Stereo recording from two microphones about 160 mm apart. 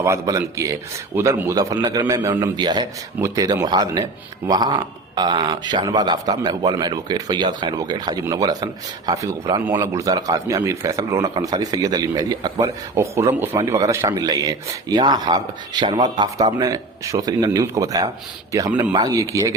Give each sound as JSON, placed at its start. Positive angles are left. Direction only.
{"t": 0.0, "sound": "a man's voice", "side_deg": -20}